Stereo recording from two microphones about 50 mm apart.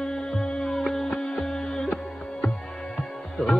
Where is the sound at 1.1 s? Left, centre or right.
Centre.